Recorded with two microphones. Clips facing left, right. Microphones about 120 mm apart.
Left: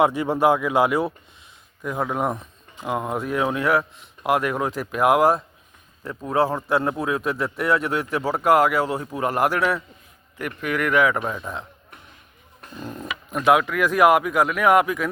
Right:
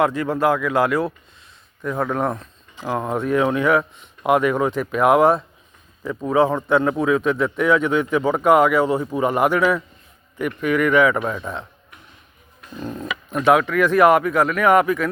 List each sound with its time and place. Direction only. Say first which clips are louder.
0.0 s speech: even; 20° left (ahead or behind)
1.8 s a man's voice: right 2 dB; 10° left (ahead or behind)
12.8 s a man's voice: right 4 dB; centre (ahead or behind)